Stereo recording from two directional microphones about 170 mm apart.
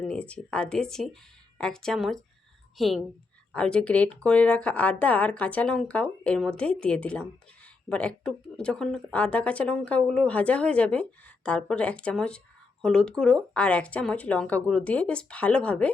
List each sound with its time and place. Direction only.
0.0 s speech: 5° left (ahead or behind)